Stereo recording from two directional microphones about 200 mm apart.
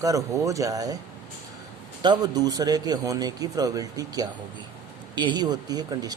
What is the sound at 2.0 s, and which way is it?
Speech, 20° right (ahead or behind).